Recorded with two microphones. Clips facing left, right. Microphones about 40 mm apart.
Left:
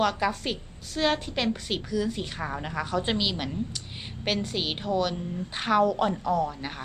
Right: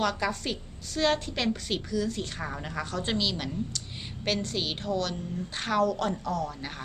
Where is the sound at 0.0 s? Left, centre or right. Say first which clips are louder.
Left 3 dB; centre.